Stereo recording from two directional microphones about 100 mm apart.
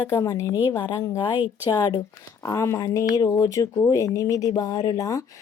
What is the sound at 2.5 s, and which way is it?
A woman's voice, 30° left (ahead or behind).